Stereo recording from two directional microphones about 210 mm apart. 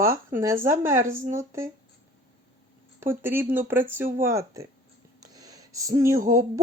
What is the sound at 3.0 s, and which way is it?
Speech, 10° right (ahead or behind).